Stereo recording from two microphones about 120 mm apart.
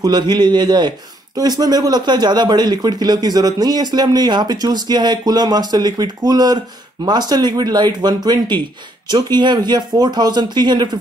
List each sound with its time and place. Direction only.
0.0 s a man's voice: 35° right (ahead or behind)